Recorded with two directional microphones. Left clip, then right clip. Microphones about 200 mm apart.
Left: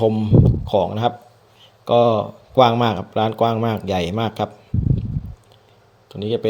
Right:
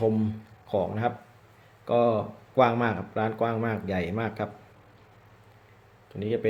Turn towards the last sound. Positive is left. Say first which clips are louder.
# left 7 dB
turn(degrees=30)  # may be behind; listen again after turning